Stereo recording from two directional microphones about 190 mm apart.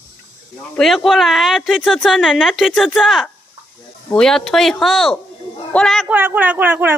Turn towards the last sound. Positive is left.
turn(degrees=-10)  # may be behind; listen again after turning